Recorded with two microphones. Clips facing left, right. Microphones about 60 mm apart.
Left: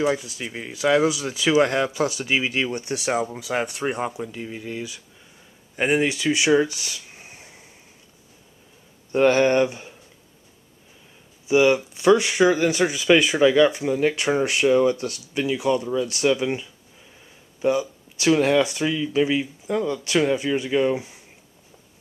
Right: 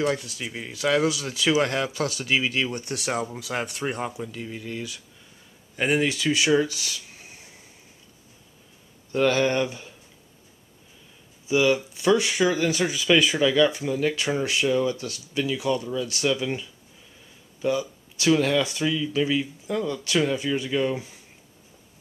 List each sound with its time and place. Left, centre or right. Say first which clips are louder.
0.0 s speech: left 3 dB; centre; by 7.4 s left
9.1 s speech: left 4 dB; left
11.4 s speech: left 4 dB; left
15.4 s speech: left 4 dB; centre